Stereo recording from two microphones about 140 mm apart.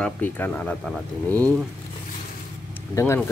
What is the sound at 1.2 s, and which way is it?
Speech, 25° right (ahead or behind).